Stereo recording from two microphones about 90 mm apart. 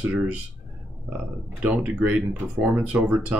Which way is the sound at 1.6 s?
15° right (ahead or behind).